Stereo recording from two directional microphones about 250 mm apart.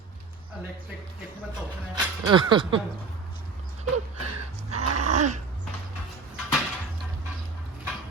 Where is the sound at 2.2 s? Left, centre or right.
Centre.